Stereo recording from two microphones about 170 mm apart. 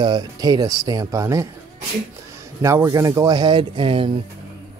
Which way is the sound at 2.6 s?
15° right (ahead or behind).